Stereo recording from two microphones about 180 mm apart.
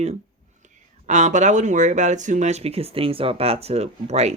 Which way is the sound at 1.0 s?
40° right (ahead or behind).